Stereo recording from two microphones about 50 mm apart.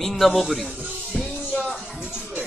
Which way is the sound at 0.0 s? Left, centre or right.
Centre.